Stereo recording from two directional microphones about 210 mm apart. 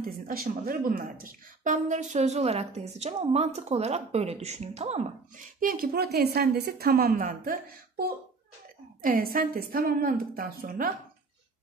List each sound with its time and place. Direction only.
0.0 s speech: 45° right (ahead or behind)
5.6 s a woman's voice: 45° right (ahead or behind)